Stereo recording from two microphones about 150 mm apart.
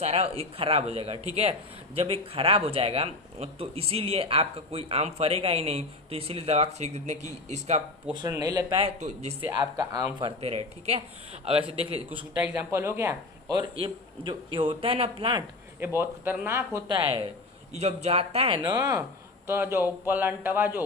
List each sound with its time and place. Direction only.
0.0 s speech: 45° right (ahead or behind)
8.3 s speech: 25° right (ahead or behind)
8.8 s speech: 45° right (ahead or behind)
9.5 s speech: 25° right (ahead or behind)
10.4 s speech: 45° right (ahead or behind)
12.4 s speech: 15° right (ahead or behind)
13.7 s speech: 35° right (ahead or behind)
15.8 s speech: 15° right (ahead or behind)
16.9 s speech: 30° right (ahead or behind)
17.7 s speech: 45° right (ahead or behind); by 20.7 s 15° right (ahead or behind)